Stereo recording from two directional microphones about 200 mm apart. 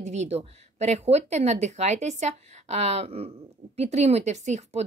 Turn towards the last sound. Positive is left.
turn(degrees=-35)  # may be behind; listen again after turning